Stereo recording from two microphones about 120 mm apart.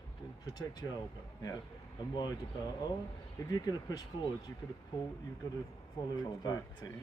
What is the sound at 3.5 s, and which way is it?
Speech, 30° left (ahead or behind).